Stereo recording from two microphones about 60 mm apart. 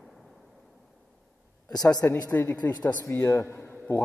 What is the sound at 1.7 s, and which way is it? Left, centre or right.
Speech, left.